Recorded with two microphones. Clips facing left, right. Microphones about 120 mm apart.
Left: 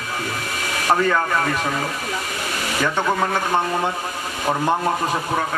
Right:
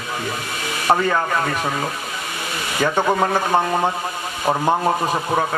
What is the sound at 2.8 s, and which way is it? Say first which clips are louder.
A man's voice: right 3 dB; 15° right (ahead or behind).